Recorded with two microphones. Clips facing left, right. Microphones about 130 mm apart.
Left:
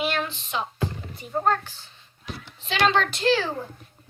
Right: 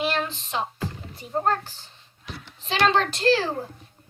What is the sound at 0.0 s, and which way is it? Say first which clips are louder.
Music: right 1 dB; 35° right (ahead or behind).